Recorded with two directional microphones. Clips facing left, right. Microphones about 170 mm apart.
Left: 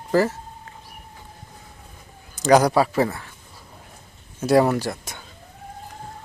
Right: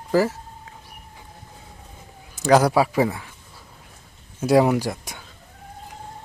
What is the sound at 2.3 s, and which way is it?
Speech, 5° right (ahead or behind).